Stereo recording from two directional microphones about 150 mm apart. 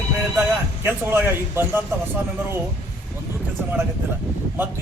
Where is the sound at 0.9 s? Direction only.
15° right (ahead or behind).